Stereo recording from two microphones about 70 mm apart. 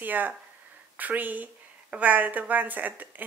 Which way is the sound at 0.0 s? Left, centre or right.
Right.